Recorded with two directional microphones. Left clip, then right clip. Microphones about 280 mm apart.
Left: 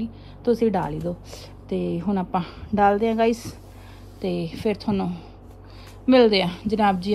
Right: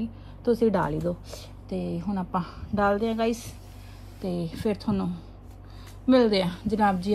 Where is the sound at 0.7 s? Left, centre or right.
Centre.